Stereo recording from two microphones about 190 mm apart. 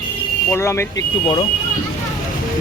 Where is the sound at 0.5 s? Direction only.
15° left (ahead or behind).